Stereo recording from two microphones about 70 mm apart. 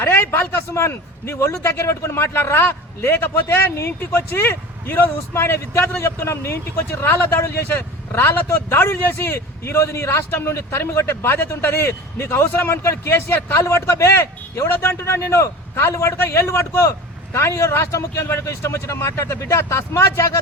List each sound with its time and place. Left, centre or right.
0.0 s a man's voice: left